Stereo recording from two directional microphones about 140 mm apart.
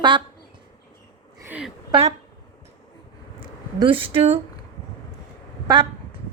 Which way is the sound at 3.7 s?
40° right (ahead or behind).